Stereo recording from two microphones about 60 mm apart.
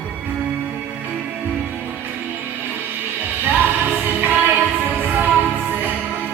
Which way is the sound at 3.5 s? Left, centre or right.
Right.